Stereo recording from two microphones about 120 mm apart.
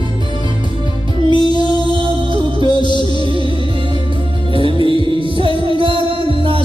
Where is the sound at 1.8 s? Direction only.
45° right (ahead or behind).